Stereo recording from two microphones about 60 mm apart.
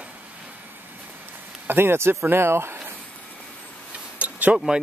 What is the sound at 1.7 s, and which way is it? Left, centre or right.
Speech, right.